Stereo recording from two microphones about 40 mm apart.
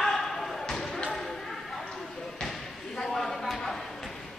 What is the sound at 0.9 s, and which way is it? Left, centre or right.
Basketball bounce, left.